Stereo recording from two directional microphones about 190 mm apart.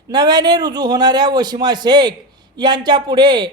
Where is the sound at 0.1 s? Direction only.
20° right (ahead or behind).